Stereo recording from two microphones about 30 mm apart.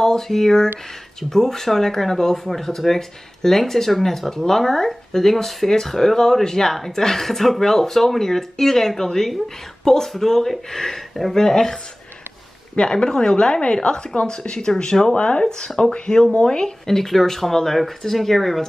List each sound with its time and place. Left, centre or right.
0.0 s speech: centre
11.3 s speech: centre
12.7 s a woman's voice: left
15.1 s a woman's voice: left; by 18.6 s centre